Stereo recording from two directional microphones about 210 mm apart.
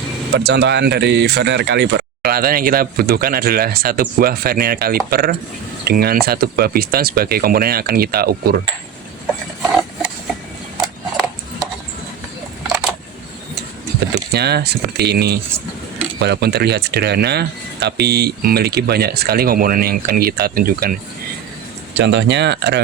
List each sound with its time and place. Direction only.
0.3 s speech: 50° right (ahead or behind)
12.6 s a sound: 10° right (ahead or behind)
14.3 s speech: 50° right (ahead or behind)
21.9 s speech: 55° right (ahead or behind)